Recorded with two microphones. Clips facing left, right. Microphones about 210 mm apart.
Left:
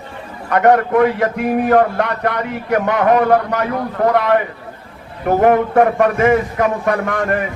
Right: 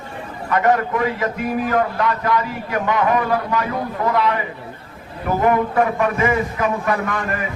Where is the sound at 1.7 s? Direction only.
55° left (ahead or behind).